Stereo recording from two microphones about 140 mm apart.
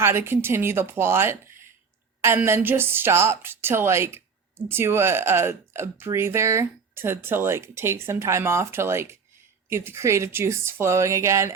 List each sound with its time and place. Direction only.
0.0 s a woman's voice: 20° right (ahead or behind)